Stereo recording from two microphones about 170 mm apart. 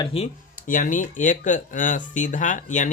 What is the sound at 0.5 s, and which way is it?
Speech, 50° left (ahead or behind).